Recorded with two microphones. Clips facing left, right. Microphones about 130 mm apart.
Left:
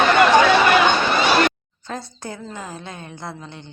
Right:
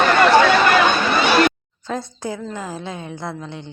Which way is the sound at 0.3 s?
10° left (ahead or behind).